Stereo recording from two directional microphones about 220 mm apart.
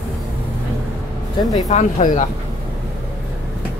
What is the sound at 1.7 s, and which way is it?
Speech, 30° left (ahead or behind).